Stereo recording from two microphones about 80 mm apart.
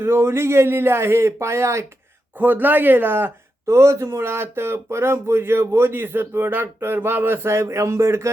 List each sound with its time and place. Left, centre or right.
0.0 s speech: right
2.4 s speech: right